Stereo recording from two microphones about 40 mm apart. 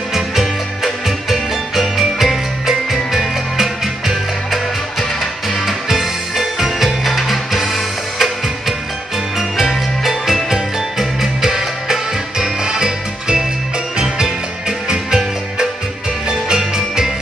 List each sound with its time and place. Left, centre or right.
0.1 s music: centre
5.9 s music: centre
14.9 s music: centre